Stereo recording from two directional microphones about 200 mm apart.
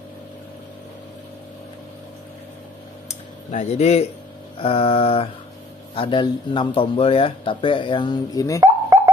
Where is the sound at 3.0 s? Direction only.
35° left (ahead or behind).